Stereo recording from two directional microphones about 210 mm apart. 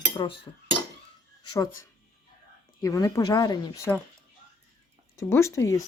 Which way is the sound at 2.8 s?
15° left (ahead or behind).